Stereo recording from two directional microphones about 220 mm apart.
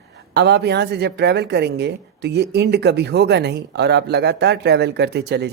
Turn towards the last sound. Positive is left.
turn(degrees=-50)  # may be behind; listen again after turning